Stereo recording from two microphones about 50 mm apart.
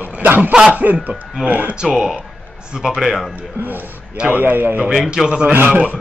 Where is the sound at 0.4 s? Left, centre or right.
Centre.